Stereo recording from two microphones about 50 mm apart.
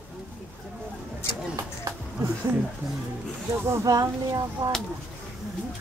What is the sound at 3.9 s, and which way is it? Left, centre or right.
Speech, right.